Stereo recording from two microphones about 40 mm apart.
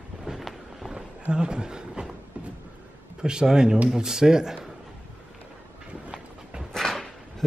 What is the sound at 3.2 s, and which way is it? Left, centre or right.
Speech, centre.